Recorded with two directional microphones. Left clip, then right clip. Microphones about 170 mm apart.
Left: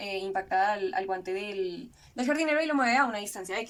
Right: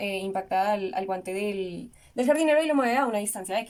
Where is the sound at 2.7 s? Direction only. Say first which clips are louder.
Right 1 dB; 35° right (ahead or behind).